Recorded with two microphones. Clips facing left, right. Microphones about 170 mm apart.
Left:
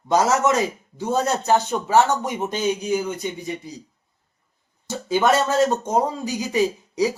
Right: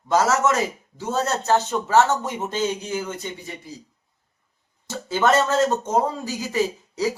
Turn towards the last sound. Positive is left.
turn(degrees=15)  # may be behind; listen again after turning